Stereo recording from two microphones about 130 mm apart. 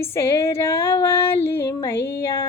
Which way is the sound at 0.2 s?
20° left (ahead or behind).